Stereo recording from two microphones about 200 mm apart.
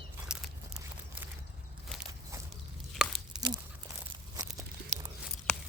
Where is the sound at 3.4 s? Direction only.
20° right (ahead or behind).